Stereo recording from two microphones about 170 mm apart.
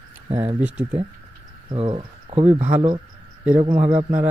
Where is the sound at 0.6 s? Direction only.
10° right (ahead or behind).